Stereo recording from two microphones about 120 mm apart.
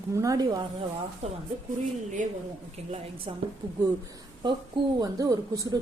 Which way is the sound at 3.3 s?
50° right (ahead or behind).